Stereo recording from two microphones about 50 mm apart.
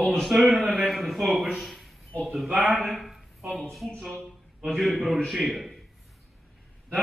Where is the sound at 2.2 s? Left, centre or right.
Centre.